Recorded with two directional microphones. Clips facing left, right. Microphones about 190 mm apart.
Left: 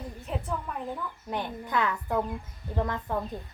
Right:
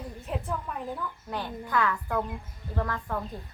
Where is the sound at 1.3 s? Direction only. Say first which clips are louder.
Even; 20° left (ahead or behind).